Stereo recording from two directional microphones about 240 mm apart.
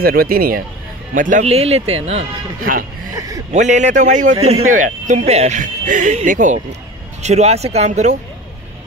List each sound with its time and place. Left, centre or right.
0.0 s speech: right
3.2 s speech: centre
3.5 s speech: right